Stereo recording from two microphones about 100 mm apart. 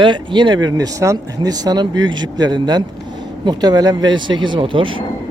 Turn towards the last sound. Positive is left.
turn(degrees=-60)  # may be behind; listen again after turning